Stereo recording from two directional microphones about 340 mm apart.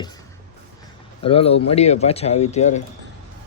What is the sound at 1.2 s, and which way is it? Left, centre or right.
Speech, centre.